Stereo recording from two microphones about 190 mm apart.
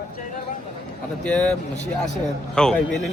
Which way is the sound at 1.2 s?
5° left (ahead or behind).